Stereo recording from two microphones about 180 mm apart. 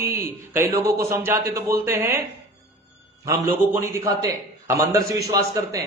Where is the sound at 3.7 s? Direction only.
15° right (ahead or behind).